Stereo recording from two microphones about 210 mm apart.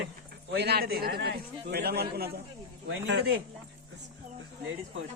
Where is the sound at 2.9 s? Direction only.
60° right (ahead or behind).